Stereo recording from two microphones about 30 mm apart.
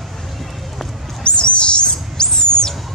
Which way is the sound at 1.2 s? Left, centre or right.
Left.